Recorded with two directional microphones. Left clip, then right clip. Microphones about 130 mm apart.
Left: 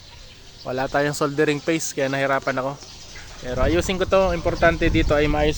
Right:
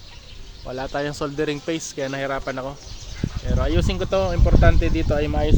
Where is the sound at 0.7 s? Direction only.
65° left (ahead or behind).